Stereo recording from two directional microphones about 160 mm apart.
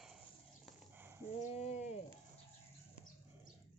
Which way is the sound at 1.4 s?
45° left (ahead or behind).